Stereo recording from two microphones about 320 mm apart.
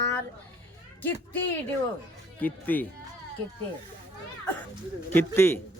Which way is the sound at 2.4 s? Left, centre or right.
Centre.